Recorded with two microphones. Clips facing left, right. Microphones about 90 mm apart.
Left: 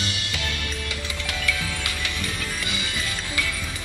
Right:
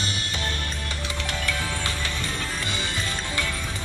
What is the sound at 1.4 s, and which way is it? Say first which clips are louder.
Music: left 1 dB; 35° right (ahead or behind).